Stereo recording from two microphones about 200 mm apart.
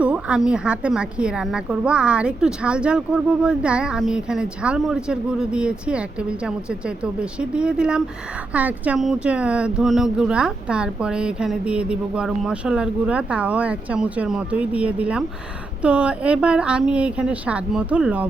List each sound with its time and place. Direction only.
0.0 s a woman's voice: 5° right (ahead or behind)